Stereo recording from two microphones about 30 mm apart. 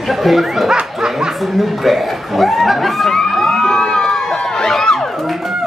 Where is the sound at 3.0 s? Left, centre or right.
Centre.